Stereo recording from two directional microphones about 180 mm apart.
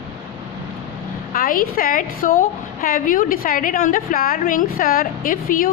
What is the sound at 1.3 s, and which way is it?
A woman's voice, 50° left (ahead or behind).